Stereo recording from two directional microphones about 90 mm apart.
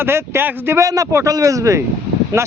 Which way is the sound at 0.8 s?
40° right (ahead or behind).